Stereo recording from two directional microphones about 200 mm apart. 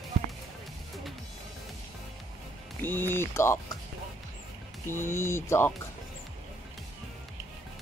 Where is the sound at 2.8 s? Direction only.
10° left (ahead or behind).